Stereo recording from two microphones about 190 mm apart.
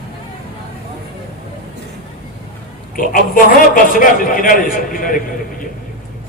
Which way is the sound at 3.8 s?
45° left (ahead or behind).